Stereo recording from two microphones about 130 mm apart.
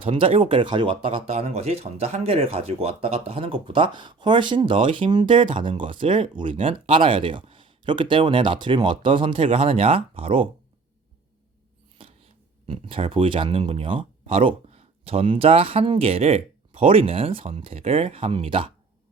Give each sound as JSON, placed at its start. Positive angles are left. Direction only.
{"t": 0.0, "sound": "speech", "side_deg": -45}
{"t": 12.6, "sound": "speech", "side_deg": -45}